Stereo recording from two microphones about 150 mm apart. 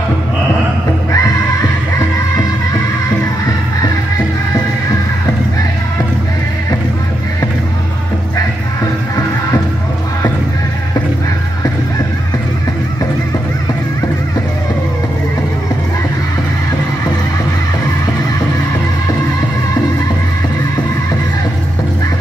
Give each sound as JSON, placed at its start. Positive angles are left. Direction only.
{"t": 1.1, "sound": "music", "side_deg": 25}